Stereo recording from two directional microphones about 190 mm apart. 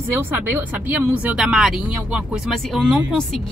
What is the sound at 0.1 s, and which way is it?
Speech, 10° right (ahead or behind).